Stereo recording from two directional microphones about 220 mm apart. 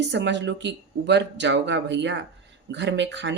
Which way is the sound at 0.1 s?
55° right (ahead or behind).